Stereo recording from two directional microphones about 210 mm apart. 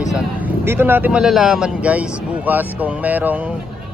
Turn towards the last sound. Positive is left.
turn(degrees=-10)  # may be behind; listen again after turning